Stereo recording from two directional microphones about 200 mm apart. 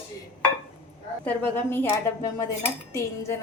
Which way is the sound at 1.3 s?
10° left (ahead or behind).